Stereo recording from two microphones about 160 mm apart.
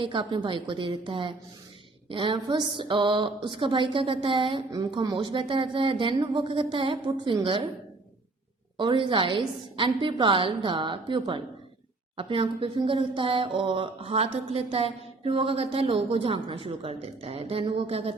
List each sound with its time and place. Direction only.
0.0 s speech: 30° right (ahead or behind)
8.8 s speech: 30° right (ahead or behind)